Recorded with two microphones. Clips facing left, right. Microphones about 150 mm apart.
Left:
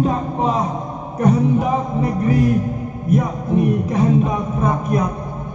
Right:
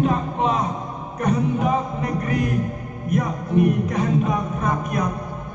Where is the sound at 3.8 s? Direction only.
30° left (ahead or behind).